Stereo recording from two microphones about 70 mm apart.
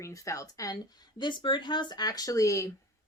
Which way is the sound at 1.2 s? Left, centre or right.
Left.